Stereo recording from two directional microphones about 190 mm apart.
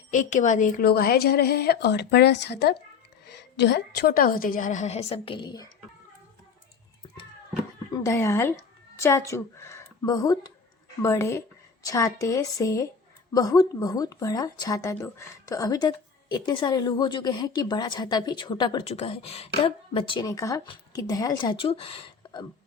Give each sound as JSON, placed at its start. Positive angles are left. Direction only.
{"t": 0.1, "sound": "a woman's voice", "side_deg": 40}
{"t": 7.9, "sound": "a woman's voice", "side_deg": 15}